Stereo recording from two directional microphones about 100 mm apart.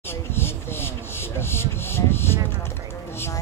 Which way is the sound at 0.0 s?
25° left (ahead or behind).